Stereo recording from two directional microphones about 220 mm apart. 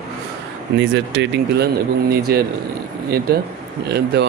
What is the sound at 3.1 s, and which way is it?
Speech, 45° right (ahead or behind).